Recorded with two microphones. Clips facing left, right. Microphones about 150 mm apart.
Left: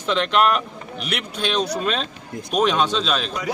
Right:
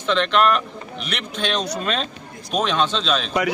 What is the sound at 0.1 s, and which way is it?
Speech, 10° left (ahead or behind).